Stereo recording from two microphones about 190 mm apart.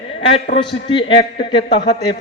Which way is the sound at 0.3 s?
35° left (ahead or behind).